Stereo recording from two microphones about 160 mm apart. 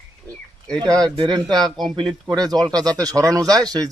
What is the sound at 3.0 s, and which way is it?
Speech, 20° right (ahead or behind).